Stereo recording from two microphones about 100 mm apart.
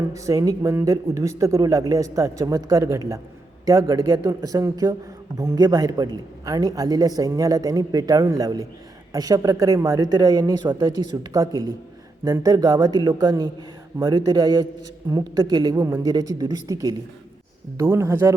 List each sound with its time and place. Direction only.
0.1 s speech: 35° right (ahead or behind)
10.1 s a man's voice: 40° right (ahead or behind)
11.3 s a man's voice: 40° right (ahead or behind)
15.7 s speech: 35° right (ahead or behind)